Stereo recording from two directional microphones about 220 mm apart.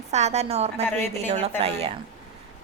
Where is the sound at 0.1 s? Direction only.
30° right (ahead or behind).